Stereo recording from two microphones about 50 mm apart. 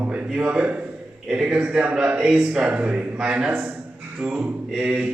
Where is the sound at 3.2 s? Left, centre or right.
Centre.